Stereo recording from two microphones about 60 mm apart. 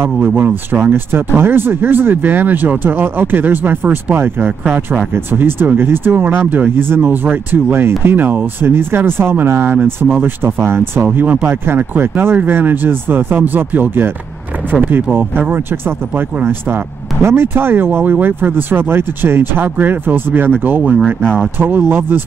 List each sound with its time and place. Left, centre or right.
0.4 s speech: right
4.6 s speech: right
5.1 s speech: right
11.1 s speech: right
11.6 s speech: right
21.2 s speech: centre
21.5 s speech: right